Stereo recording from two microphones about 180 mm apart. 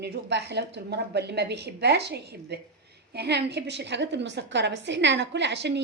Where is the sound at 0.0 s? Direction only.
65° right (ahead or behind).